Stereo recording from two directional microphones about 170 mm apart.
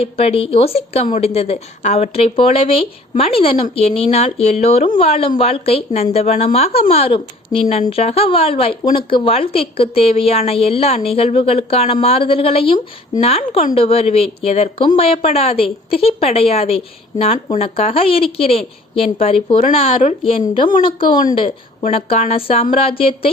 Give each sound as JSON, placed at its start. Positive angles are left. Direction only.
{"t": 0.0, "sound": "a woman's voice", "side_deg": 35}